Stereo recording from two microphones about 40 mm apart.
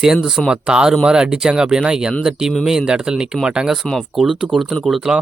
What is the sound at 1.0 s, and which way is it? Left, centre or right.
Speech, right.